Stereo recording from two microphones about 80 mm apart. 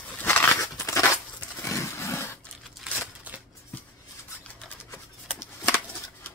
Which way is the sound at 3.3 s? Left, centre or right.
Right.